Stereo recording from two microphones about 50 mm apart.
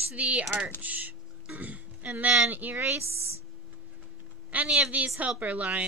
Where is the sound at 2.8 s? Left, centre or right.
Right.